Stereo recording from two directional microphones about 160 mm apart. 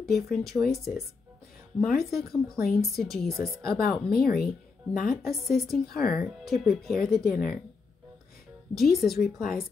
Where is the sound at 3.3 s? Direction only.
20° right (ahead or behind).